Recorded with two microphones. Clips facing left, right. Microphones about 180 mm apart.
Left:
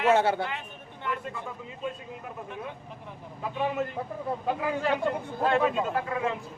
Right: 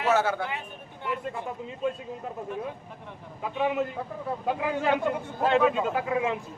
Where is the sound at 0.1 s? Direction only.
25° left (ahead or behind).